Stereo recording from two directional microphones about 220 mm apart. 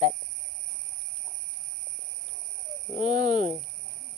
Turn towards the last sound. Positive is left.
turn(degrees=-30)  # may be behind; listen again after turning